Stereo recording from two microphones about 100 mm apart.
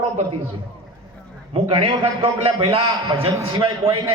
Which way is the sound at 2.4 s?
70° right (ahead or behind).